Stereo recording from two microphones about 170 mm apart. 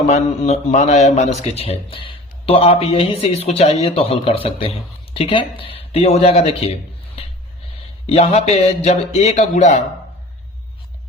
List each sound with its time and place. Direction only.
0.1 s a man's voice: 40° left (ahead or behind)
8.0 s a man's voice: 40° left (ahead or behind)